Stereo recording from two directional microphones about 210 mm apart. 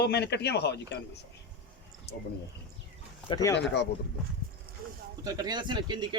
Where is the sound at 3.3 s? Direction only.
15° left (ahead or behind).